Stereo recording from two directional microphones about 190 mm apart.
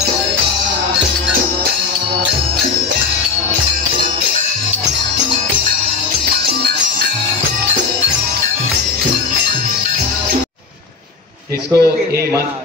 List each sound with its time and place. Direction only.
11.7 s a man's voice: 15° right (ahead or behind)